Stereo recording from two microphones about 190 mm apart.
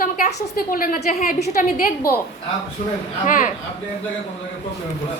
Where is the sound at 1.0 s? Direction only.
35° left (ahead or behind).